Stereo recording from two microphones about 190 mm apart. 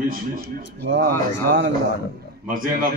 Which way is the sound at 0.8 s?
65° right (ahead or behind).